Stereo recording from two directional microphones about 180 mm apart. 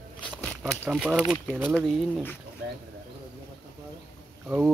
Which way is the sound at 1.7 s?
10° left (ahead or behind).